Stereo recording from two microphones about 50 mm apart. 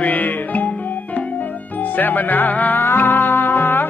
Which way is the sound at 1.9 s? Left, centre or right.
Left.